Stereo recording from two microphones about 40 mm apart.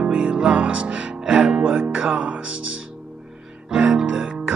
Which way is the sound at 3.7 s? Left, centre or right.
Centre.